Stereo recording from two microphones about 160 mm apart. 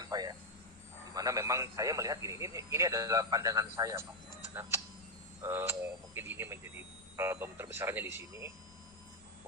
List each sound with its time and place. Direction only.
0.1 s a sound: 25° right (ahead or behind)
1.1 s a man's voice: 20° right (ahead or behind)
5.4 s speech: 15° right (ahead or behind)